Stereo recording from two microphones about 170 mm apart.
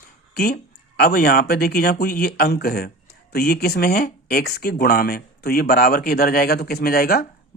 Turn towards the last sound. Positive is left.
turn(degrees=60)  # may be behind; listen again after turning